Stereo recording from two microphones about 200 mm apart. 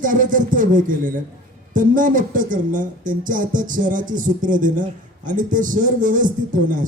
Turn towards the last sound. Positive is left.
turn(degrees=-40)  # may be behind; listen again after turning